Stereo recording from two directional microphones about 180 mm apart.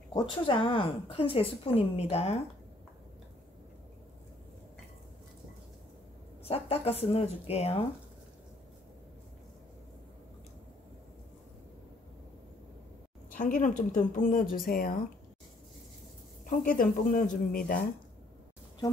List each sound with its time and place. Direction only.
0.1 s a woman's voice: 25° left (ahead or behind)
6.4 s a woman's voice: 35° left (ahead or behind)
13.3 s a woman's voice: 50° left (ahead or behind)
16.4 s a woman's voice: 50° left (ahead or behind)